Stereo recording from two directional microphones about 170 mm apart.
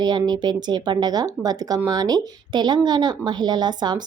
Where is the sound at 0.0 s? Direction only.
25° right (ahead or behind).